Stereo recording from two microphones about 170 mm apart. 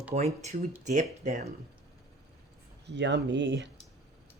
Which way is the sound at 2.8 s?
90° right.